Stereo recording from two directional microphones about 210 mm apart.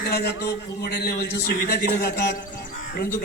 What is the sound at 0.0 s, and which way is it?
A man's voice, 50° left (ahead or behind).